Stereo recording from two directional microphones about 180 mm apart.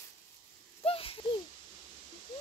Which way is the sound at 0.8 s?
30° left (ahead or behind).